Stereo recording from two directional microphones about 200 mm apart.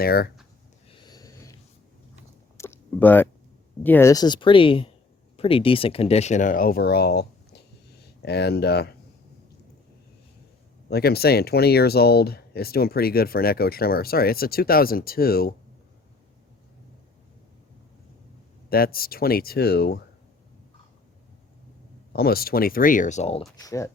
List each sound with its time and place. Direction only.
0.0 s speech: 50° left (ahead or behind)
1.0 s a sound: 20° left (ahead or behind)
2.6 s a sound: 10° left (ahead or behind)
3.8 s speech: 10° left (ahead or behind); by 8.9 s 55° left (ahead or behind)
10.8 s speech: 50° left (ahead or behind)
18.7 s speech: 50° left (ahead or behind)
22.1 s speech: 50° left (ahead or behind); by 23.4 s 35° left (ahead or behind)
23.6 s speech: 15° left (ahead or behind)